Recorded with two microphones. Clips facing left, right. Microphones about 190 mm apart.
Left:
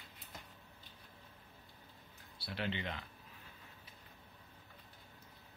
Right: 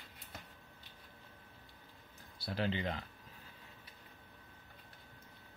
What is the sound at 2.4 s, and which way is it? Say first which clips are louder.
Speech: right 4 dB; 40° right (ahead or behind).